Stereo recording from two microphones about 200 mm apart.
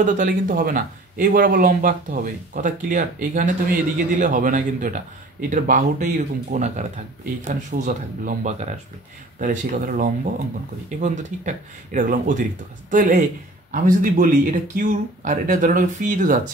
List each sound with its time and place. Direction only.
0.0 s speech: 40° right (ahead or behind)